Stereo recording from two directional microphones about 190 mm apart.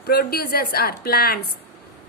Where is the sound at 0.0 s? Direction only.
55° left (ahead or behind).